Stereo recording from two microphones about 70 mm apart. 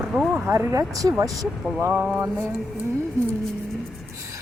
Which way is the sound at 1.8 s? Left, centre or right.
Right.